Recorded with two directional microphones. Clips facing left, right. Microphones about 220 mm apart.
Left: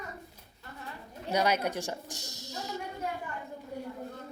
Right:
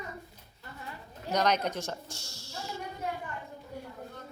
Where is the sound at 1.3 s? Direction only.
10° left (ahead or behind).